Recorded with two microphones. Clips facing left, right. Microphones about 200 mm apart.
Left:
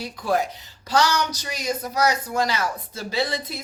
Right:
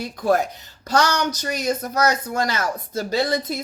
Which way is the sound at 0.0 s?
45° right (ahead or behind).